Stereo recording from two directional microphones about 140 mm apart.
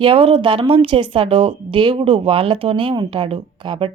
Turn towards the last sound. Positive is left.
turn(degrees=-40)  # may be behind; listen again after turning